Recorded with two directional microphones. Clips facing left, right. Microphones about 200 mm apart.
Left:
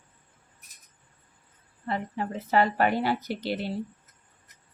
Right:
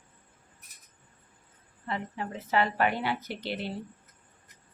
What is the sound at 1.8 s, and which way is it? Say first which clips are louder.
A woman's voice: left 4 dB; 40° left (ahead or behind).